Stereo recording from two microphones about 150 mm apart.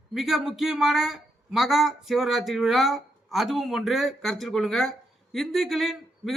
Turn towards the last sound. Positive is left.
turn(degrees=0)  # may be behind; listen again after turning